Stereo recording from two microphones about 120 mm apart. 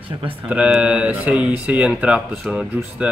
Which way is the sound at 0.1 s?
45° right (ahead or behind).